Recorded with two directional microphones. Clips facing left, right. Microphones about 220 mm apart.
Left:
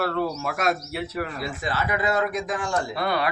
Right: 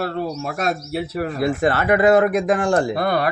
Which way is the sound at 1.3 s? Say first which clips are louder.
Right 10 dB; 60° right (ahead or behind).